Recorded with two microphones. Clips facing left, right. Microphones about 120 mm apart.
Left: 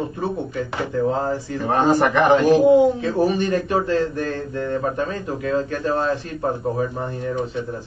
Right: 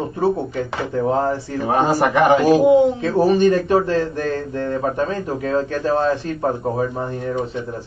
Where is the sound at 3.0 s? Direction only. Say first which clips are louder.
Right 5 dB; 30° right (ahead or behind).